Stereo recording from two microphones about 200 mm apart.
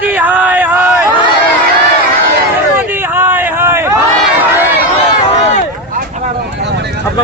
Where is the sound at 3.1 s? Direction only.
10° right (ahead or behind).